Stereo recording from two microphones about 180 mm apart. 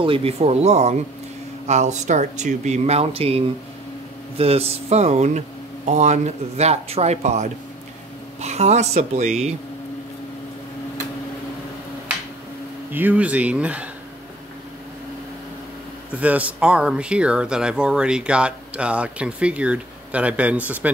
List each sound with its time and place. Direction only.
0.0 s speech: 30° right (ahead or behind)
12.9 s speech: 10° right (ahead or behind)
16.2 s speech: 10° right (ahead or behind)